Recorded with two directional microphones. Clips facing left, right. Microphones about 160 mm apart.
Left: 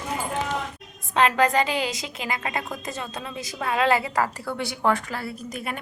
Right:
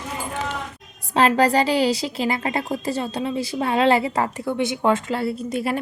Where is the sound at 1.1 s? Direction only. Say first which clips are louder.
Right 3 dB; 35° right (ahead or behind).